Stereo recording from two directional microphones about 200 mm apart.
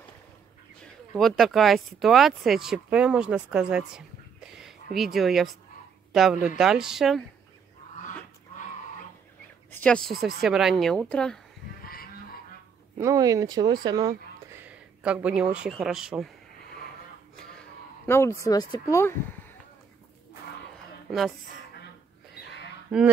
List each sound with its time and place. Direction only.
0.8 s a woman's voice: centre (ahead or behind)
9.7 s a woman's voice: 5° left (ahead or behind)
11.8 s a sound: 50° left (ahead or behind)
12.9 s speech: 15° right (ahead or behind)
14.6 s speech: 10° right (ahead or behind)
18.0 s speech: 10° left (ahead or behind)
22.9 s a woman's voice: centre (ahead or behind)